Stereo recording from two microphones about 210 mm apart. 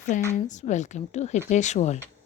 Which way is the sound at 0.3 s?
35° left (ahead or behind).